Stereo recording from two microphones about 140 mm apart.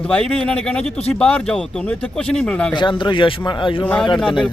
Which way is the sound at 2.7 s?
35° left (ahead or behind).